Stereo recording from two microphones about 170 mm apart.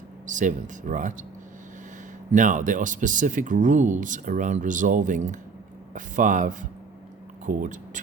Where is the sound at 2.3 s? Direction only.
50° right (ahead or behind).